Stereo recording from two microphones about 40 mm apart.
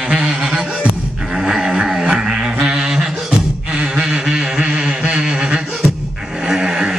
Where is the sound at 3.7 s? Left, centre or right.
Right.